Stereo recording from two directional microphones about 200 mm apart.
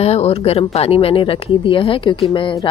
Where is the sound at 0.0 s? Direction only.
30° left (ahead or behind).